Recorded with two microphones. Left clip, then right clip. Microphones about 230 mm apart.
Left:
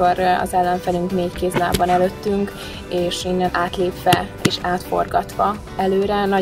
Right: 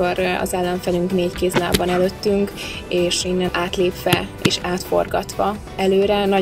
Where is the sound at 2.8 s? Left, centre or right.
Right.